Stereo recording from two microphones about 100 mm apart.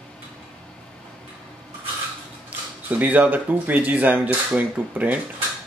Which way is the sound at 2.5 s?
15° right (ahead or behind).